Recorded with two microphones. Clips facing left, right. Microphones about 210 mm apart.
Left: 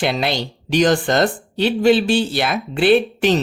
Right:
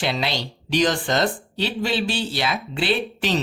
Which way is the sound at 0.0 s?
50° left (ahead or behind).